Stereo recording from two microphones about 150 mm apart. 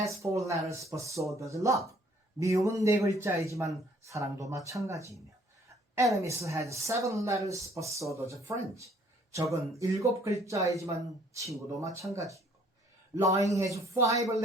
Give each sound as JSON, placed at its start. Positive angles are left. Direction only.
{"t": 0.2, "sound": "speech", "side_deg": -20}
{"t": 5.6, "sound": "a sound", "side_deg": -20}
{"t": 6.1, "sound": "speech", "side_deg": -20}